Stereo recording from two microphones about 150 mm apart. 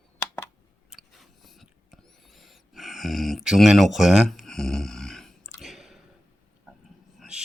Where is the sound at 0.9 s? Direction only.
Centre (ahead or behind).